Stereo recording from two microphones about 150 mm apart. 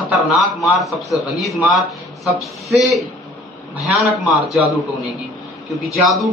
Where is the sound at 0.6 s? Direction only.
Centre (ahead or behind).